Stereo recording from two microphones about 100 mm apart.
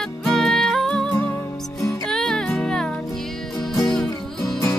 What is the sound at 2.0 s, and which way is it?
Music, 5° left (ahead or behind).